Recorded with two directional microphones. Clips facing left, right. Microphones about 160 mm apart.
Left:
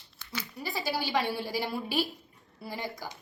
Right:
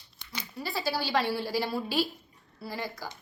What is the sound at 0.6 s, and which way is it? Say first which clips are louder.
A woman's voice: right 2 dB; 15° left (ahead or behind).